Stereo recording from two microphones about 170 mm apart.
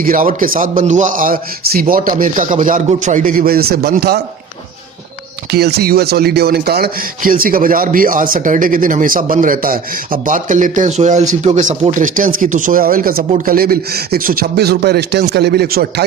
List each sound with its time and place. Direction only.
0.0 s a man's voice: 55° right (ahead or behind)
5.5 s speech: 70° right (ahead or behind)